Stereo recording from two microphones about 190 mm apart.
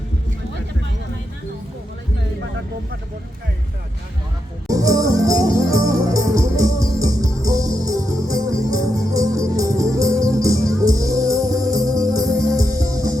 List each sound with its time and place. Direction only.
4.7 s music: 20° right (ahead or behind)